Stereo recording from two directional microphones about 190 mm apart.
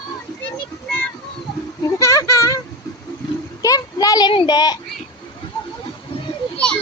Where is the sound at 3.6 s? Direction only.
20° left (ahead or behind).